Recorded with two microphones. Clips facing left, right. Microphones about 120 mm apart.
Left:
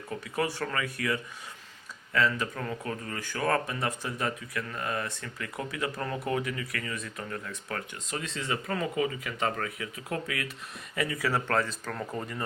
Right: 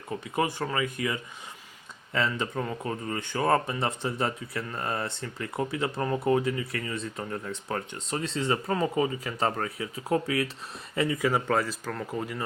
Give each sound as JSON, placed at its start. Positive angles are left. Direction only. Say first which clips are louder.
{"t": 0.3, "sound": "speech", "louder": "right 3 dB", "side_deg": -20}
{"t": 2.6, "sound": "speech", "louder": "right 3 dB", "side_deg": -10}
{"t": 3.1, "sound": "speech", "louder": "right 4 dB", "side_deg": -25}